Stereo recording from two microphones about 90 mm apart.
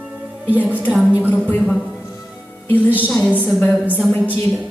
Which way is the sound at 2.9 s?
20° right (ahead or behind).